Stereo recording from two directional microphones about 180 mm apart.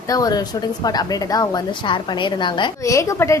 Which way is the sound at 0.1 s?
20° left (ahead or behind).